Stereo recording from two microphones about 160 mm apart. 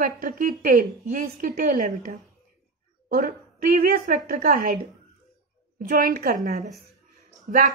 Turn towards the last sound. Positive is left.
turn(degrees=-55)  # may be behind; listen again after turning